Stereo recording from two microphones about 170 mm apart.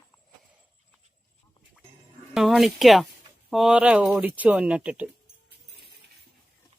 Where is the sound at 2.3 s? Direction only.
Centre (ahead or behind).